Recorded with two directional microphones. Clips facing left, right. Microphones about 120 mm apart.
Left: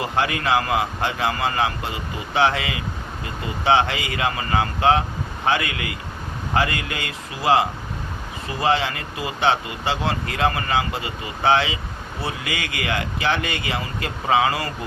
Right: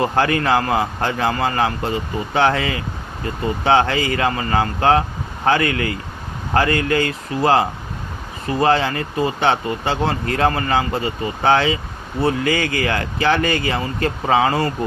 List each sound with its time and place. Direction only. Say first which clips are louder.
0.0 s speech: right 5 dB; 40° right (ahead or behind)
8.6 s speech: right 4 dB; 40° right (ahead or behind)